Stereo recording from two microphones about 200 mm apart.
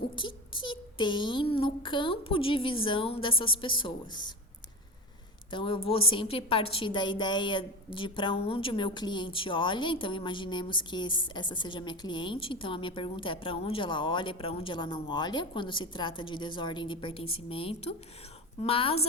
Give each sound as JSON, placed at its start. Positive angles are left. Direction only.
{"t": 0.2, "sound": "a woman's voice", "side_deg": 25}
{"t": 5.5, "sound": "a woman's voice", "side_deg": 25}